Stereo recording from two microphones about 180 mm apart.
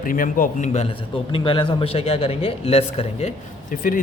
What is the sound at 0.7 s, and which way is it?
A man's voice, 35° left (ahead or behind).